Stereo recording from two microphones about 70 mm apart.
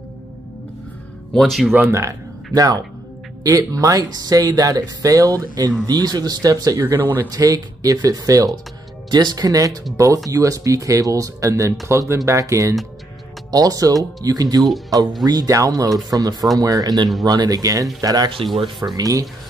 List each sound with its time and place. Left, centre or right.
1.3 s speech: centre
1.9 s speech: right
2.5 s speech: right
9.1 s speech: right
13.5 s speech: right
18.0 s speech: right